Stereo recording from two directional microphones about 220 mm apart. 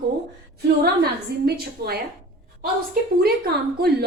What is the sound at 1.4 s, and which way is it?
A woman's voice, 45° right (ahead or behind).